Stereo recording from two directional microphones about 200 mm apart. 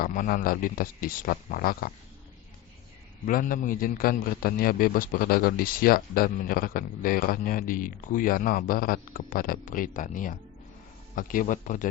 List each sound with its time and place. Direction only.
0.0 s a man's voice: 45° left (ahead or behind)
3.2 s a man's voice: 45° left (ahead or behind)